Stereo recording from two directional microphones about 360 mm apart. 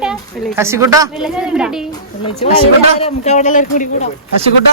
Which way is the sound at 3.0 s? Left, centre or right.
Centre.